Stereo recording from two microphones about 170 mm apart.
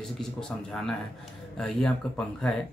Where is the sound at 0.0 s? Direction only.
5° left (ahead or behind).